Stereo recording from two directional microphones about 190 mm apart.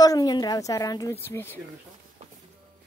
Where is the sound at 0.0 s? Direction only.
20° left (ahead or behind).